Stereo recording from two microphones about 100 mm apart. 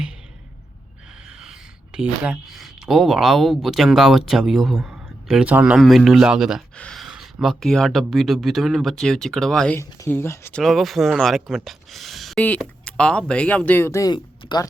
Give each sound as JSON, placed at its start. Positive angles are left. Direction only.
{"t": 1.4, "sound": "speech", "side_deg": -5}
{"t": 5.7, "sound": "speech", "side_deg": 0}
{"t": 6.7, "sound": "speech", "side_deg": 10}
{"t": 7.0, "sound": "speech", "side_deg": -5}
{"t": 9.7, "sound": "speech", "side_deg": 25}
{"t": 10.5, "sound": "speech", "side_deg": 0}
{"t": 12.4, "sound": "speech", "side_deg": 10}